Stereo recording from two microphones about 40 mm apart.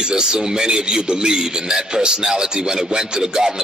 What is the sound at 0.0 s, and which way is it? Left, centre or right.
A man's voice, centre.